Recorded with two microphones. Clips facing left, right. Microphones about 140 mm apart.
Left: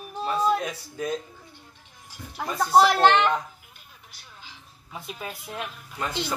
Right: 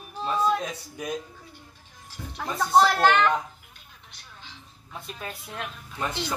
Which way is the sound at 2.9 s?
20° left (ahead or behind).